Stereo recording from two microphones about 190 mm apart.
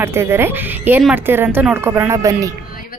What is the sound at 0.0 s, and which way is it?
A woman's voice, 15° right (ahead or behind).